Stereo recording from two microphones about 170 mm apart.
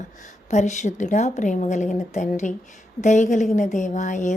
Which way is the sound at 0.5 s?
45° left (ahead or behind).